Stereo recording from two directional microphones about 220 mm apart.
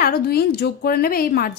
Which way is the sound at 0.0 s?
45° left (ahead or behind).